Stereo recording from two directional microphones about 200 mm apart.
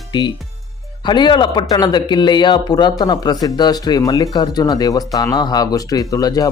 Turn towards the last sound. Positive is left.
turn(degrees=20)  # may be behind; listen again after turning